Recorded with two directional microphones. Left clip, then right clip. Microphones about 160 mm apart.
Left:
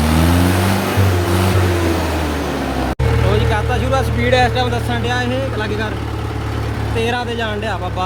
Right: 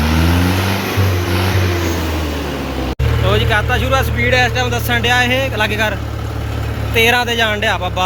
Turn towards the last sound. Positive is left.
turn(degrees=-10)  # may be behind; listen again after turning